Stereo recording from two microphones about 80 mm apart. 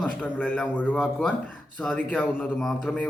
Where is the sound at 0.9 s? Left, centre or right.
Centre.